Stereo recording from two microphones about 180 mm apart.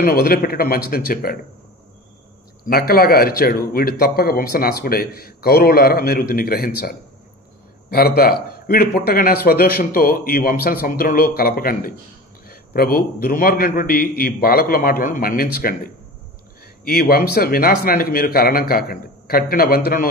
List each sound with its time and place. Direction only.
0.0 s speech: 55° left (ahead or behind)
2.6 s a man's voice: 55° left (ahead or behind)